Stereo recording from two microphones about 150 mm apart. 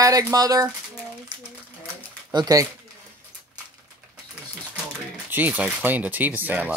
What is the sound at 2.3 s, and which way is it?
Speech, 25° right (ahead or behind).